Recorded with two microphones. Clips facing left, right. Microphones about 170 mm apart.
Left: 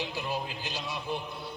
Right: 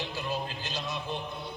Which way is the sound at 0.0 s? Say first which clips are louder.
Even; 15° left (ahead or behind).